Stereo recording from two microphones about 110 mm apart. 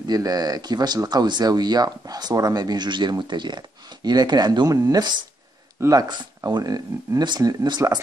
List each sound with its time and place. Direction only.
0.0 s speech: 35° right (ahead or behind)